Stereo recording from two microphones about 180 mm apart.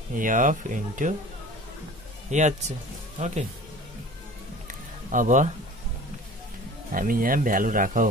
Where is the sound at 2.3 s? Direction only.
40° right (ahead or behind).